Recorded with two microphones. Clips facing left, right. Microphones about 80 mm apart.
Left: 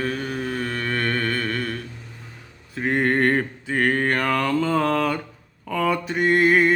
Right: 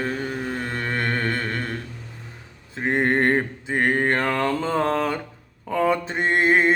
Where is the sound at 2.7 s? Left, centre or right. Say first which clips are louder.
Even; right.